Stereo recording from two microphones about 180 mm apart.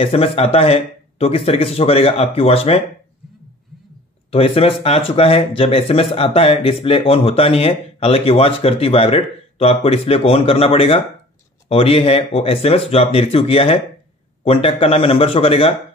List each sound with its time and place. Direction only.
0.0 s speech: 30° left (ahead or behind)
4.3 s speech: 30° left (ahead or behind)